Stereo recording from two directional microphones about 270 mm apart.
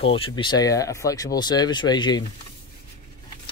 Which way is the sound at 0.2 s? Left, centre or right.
Centre.